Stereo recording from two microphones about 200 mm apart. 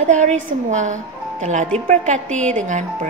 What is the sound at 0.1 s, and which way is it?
A woman's voice, 40° right (ahead or behind).